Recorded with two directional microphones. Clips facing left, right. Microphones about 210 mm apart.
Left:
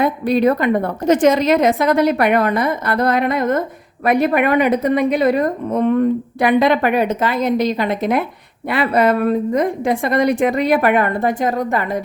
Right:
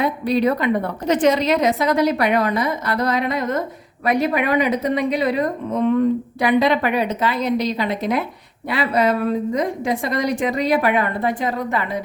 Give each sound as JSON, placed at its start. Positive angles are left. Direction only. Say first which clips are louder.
{"t": 0.0, "sound": "a woman's voice", "louder": "left 3 dB", "side_deg": 50}